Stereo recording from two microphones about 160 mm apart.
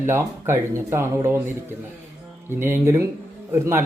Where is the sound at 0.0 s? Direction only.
15° right (ahead or behind).